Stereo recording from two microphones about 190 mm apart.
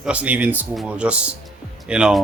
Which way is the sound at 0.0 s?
5° right (ahead or behind).